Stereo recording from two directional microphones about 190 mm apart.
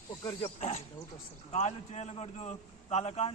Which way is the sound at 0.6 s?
40° left (ahead or behind).